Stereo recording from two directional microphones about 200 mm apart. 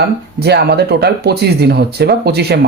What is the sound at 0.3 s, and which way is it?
Speech, 55° right (ahead or behind).